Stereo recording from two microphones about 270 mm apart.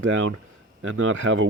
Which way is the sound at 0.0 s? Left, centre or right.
Right.